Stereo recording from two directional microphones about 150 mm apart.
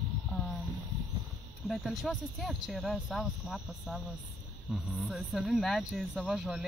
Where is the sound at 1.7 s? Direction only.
Centre (ahead or behind).